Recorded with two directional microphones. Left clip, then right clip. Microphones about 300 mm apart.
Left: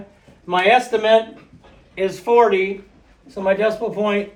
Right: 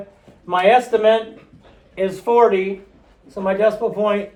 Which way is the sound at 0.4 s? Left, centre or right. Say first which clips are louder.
Right 1 dB; centre.